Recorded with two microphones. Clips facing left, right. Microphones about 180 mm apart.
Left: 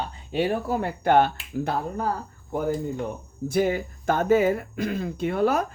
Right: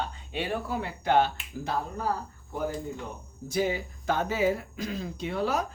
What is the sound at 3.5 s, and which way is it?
Speech, 55° left (ahead or behind).